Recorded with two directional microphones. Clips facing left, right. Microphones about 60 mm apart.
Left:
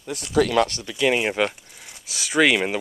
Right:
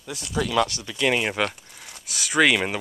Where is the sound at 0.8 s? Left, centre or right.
Centre.